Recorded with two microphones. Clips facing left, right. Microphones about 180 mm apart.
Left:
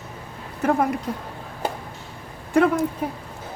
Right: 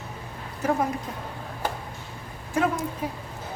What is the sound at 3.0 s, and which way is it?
Speech, 55° left (ahead or behind).